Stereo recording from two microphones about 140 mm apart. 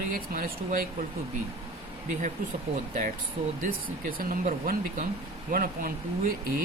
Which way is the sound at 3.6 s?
80° right.